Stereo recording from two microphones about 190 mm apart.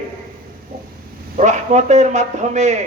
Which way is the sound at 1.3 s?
40° right (ahead or behind).